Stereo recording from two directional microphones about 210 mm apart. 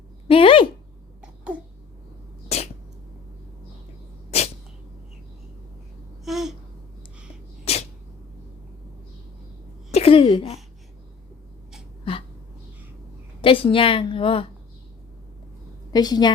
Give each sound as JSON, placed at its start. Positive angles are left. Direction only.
{"t": 0.3, "sound": "a sound", "side_deg": 25}
{"t": 2.5, "sound": "cat", "side_deg": 30}
{"t": 6.2, "sound": "a sound", "side_deg": 0}
{"t": 7.6, "sound": "sneeze", "side_deg": 30}
{"t": 9.9, "sound": "speech", "side_deg": 25}
{"t": 13.4, "sound": "a woman's voice", "side_deg": 25}
{"t": 15.9, "sound": "a woman's voice", "side_deg": 20}